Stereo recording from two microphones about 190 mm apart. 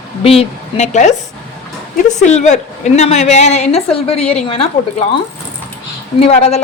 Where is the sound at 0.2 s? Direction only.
30° left (ahead or behind).